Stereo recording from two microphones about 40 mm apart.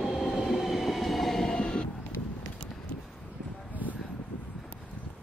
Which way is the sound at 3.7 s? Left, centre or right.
Left.